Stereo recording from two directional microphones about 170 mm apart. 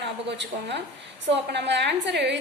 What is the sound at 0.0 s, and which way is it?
A woman's voice, 90° right.